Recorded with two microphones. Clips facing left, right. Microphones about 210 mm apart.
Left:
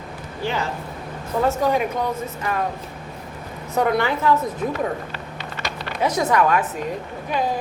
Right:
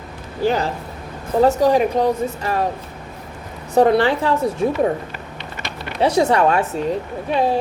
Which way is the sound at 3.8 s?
30° right (ahead or behind).